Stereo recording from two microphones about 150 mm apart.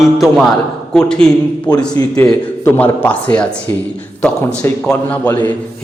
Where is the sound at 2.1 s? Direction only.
15° left (ahead or behind).